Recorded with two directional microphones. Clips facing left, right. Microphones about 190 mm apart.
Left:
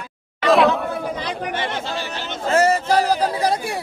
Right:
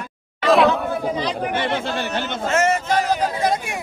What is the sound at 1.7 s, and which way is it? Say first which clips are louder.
Speech: right 4 dB; 55° right (ahead or behind).